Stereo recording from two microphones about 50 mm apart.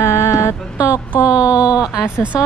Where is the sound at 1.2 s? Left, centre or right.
Right.